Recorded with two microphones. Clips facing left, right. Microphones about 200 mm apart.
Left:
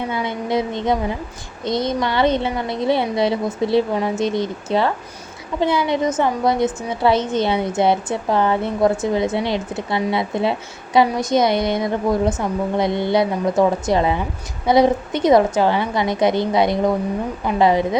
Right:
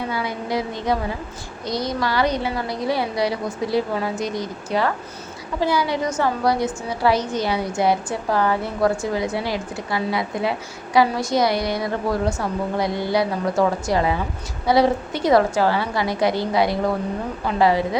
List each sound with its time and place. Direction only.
0.1 s a woman's voice: 25° left (ahead or behind)